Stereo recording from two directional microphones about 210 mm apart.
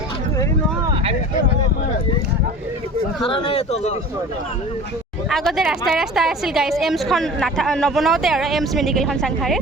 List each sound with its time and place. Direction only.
3.2 s a man's voice: 20° left (ahead or behind)
5.3 s a woman's voice: centre (ahead or behind)